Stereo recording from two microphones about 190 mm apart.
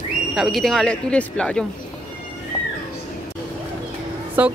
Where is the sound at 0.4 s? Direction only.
Centre (ahead or behind).